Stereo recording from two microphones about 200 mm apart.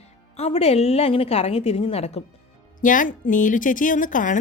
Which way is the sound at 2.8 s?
40° left (ahead or behind).